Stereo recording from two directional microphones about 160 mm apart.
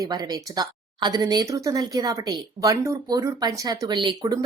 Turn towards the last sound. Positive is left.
turn(degrees=-25)  # may be behind; listen again after turning